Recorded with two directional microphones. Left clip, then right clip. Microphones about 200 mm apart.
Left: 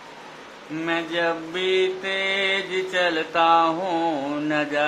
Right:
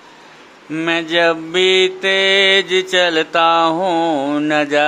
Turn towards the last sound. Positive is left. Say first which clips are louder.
# right 8 dB
turn(degrees=-45)  # may be behind; listen again after turning